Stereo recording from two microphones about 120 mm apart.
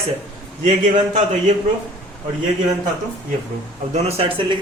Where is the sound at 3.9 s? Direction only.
55° right (ahead or behind).